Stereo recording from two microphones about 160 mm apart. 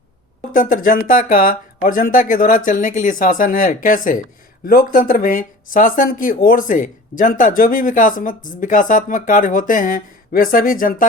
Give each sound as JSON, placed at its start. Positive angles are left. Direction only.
{"t": 0.5, "sound": "speech", "side_deg": 60}